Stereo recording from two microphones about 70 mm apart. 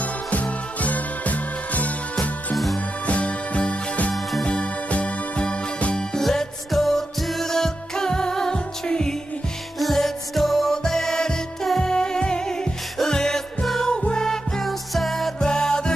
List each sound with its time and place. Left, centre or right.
0.0 s music: left
2.5 s music: centre
3.1 s jingle bell: centre
4.1 s music: centre
4.5 s music: centre